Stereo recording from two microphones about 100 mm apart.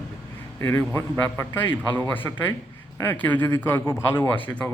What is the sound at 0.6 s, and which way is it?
Speech, 25° left (ahead or behind).